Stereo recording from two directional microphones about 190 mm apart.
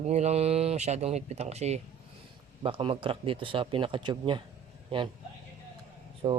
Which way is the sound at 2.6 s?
30° right (ahead or behind).